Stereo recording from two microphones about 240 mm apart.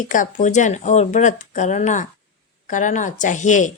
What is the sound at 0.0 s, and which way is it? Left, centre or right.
Speech, left.